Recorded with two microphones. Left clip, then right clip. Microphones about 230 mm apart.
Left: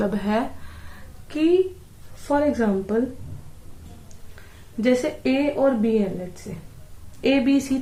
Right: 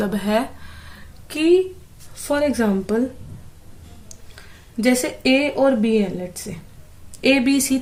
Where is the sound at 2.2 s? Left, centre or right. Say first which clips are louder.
Right 1 dB; right.